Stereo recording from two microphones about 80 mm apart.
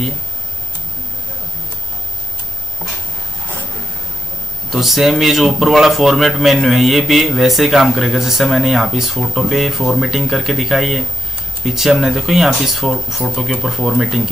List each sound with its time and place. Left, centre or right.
4.6 s a man's voice: centre